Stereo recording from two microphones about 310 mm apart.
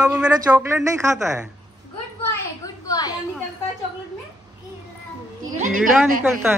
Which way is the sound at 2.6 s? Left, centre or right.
Centre.